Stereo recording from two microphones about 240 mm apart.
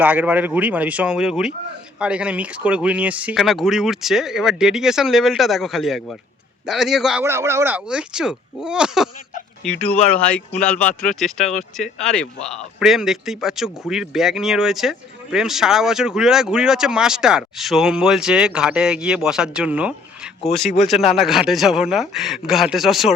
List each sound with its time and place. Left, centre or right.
0.0 s speech: centre